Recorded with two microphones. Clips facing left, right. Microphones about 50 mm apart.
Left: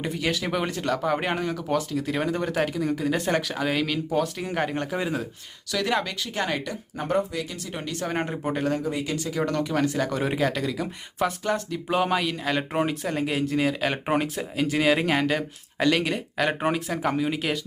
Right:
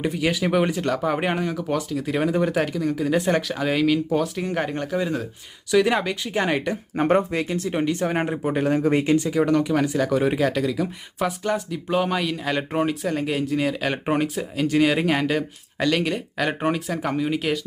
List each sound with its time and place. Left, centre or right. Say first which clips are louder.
0.0 s speech: right 4 dB; centre
5.7 s speech: right 6 dB; centre
6.9 s speech: right 6 dB; right
7.7 s speech: right 6 dB; right
8.8 s speech: right 8 dB; right
9.0 s speech: right 9 dB; right
9.3 s speech: right 5 dB; centre